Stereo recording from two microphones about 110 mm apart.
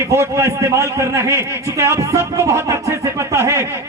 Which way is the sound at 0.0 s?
25° right (ahead or behind).